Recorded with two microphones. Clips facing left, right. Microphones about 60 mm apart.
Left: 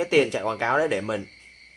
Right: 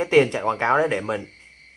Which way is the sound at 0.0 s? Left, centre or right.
Right.